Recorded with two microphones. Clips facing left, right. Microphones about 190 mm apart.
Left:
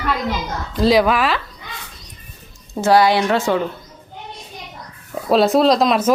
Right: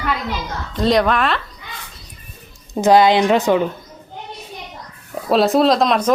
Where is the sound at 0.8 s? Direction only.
5° left (ahead or behind).